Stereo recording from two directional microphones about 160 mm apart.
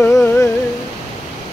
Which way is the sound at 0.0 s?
10° left (ahead or behind).